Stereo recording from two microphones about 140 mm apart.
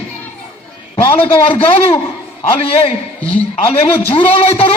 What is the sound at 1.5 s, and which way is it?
Speech, 40° left (ahead or behind).